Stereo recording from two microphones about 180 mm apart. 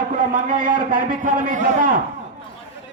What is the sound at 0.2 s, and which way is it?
A man's voice, 50° right (ahead or behind).